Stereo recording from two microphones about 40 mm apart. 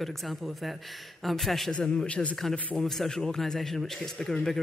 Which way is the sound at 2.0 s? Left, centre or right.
Left.